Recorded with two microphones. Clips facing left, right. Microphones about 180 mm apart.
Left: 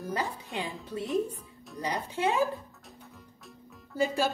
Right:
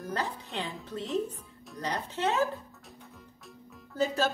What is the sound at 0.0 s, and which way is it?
Speech, 10° left (ahead or behind).